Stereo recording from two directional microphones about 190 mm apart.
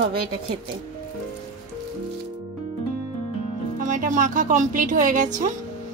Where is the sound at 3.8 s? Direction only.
40° right (ahead or behind).